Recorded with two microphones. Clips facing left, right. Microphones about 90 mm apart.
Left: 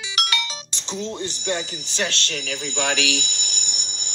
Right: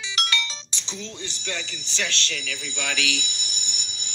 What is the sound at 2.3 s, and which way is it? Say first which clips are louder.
Speech: left 6 dB; 65° left (ahead or behind).